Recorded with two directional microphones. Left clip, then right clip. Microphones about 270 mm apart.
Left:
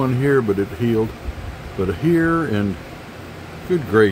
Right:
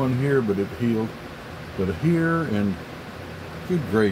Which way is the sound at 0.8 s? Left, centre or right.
Centre.